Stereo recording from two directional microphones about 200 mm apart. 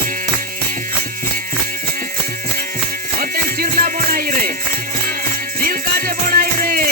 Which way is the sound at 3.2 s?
45° right (ahead or behind).